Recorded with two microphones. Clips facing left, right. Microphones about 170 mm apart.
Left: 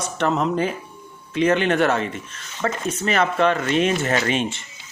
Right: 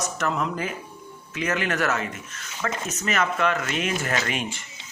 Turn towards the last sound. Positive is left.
turn(degrees=25)  # may be behind; listen again after turning